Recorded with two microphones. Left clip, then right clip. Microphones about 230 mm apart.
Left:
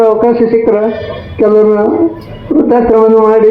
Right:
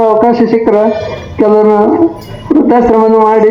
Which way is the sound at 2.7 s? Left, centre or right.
Right.